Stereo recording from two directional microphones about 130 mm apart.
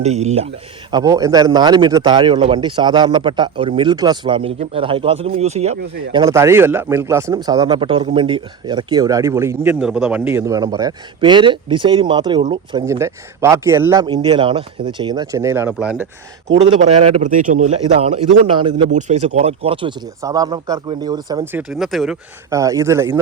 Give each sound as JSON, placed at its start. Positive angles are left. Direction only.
{"t": 0.0, "sound": "a man's voice", "side_deg": -55}
{"t": 0.9, "sound": "a man's voice", "side_deg": -30}
{"t": 6.1, "sound": "a man's voice", "side_deg": -25}
{"t": 9.8, "sound": "a man's voice", "side_deg": -10}
{"t": 12.8, "sound": "a man's voice", "side_deg": -20}
{"t": 14.0, "sound": "a man's voice", "side_deg": -35}
{"t": 15.8, "sound": "speech", "side_deg": -10}
{"t": 16.6, "sound": "a man's voice", "side_deg": -55}
{"t": 18.5, "sound": "a man's voice", "side_deg": -40}
{"t": 18.9, "sound": "a man's voice", "side_deg": -65}
{"t": 20.2, "sound": "a man's voice", "side_deg": -30}
{"t": 21.7, "sound": "speech", "side_deg": 0}
{"t": 22.4, "sound": "a man's voice", "side_deg": -25}